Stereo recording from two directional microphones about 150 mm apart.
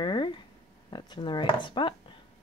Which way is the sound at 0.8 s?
30° left (ahead or behind).